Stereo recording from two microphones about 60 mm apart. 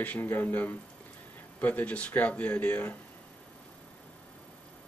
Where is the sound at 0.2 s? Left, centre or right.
Left.